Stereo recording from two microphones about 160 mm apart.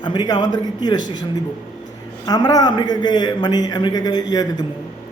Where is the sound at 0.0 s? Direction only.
25° left (ahead or behind).